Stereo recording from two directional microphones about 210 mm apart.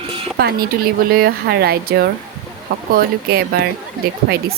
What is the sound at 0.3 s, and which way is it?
Speech, 45° right (ahead or behind).